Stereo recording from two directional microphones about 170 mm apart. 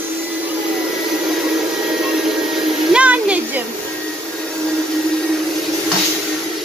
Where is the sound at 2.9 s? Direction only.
5° right (ahead or behind).